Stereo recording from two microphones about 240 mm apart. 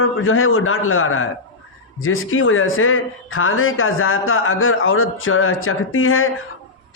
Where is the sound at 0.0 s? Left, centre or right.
Left.